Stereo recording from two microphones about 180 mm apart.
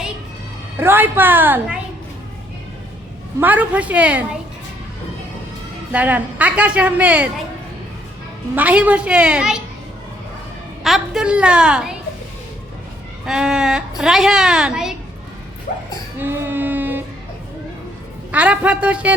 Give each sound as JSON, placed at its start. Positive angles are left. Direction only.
{"t": 0.8, "sound": "a woman's voice", "side_deg": -10}
{"t": 3.4, "sound": "a woman's voice", "side_deg": -10}
{"t": 5.9, "sound": "a woman's voice", "side_deg": -10}
{"t": 8.5, "sound": "a woman's voice", "side_deg": -10}
{"t": 10.8, "sound": "a child's voice", "side_deg": 0}
{"t": 13.2, "sound": "a child's voice", "side_deg": -5}
{"t": 15.7, "sound": "dog", "side_deg": 45}
{"t": 16.2, "sound": "music", "side_deg": -10}
{"t": 18.3, "sound": "a woman's voice", "side_deg": -10}